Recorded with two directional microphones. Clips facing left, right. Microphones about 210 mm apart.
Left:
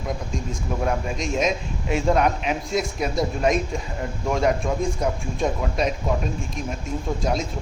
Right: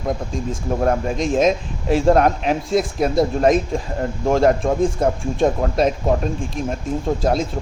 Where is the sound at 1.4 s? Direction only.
35° right (ahead or behind).